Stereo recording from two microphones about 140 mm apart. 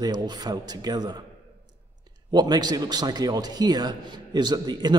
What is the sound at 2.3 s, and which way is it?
A man's voice, 30° right (ahead or behind).